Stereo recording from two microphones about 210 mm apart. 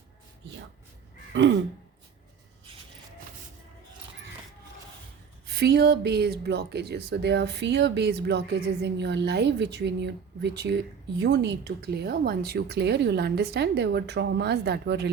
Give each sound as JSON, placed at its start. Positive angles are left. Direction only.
{"t": 1.3, "sound": "gasp", "side_deg": -60}
{"t": 5.5, "sound": "speech", "side_deg": -50}